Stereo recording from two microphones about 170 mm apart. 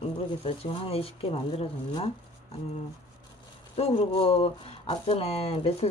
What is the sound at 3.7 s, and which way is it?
Speech, 35° left (ahead or behind).